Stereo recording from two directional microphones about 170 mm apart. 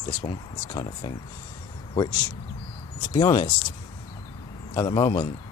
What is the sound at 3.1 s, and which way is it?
Speech, 25° left (ahead or behind).